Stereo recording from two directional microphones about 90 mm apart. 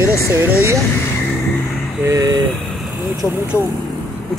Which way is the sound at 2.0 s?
35° right (ahead or behind).